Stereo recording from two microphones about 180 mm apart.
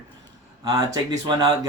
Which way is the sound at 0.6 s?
20° right (ahead or behind).